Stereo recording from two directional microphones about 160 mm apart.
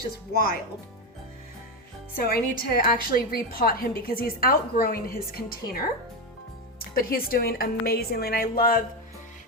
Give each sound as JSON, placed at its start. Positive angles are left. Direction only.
{"t": 0.3, "sound": "a woman's voice", "side_deg": 70}
{"t": 2.1, "sound": "a woman's voice", "side_deg": 70}